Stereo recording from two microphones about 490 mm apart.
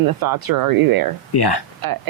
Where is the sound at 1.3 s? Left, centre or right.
Left.